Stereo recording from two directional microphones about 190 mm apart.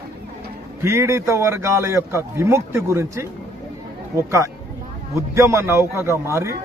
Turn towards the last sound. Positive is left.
turn(degrees=-15)  # may be behind; listen again after turning